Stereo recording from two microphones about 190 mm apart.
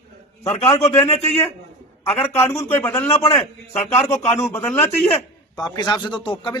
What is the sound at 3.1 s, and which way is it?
Speech, 30° left (ahead or behind).